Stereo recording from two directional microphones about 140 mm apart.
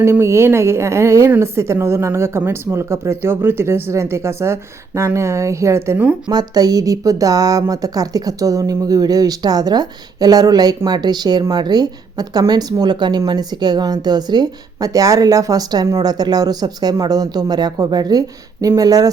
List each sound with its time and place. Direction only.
0.0 s a woman's voice: 20° right (ahead or behind)
6.3 s a woman's voice: 25° right (ahead or behind)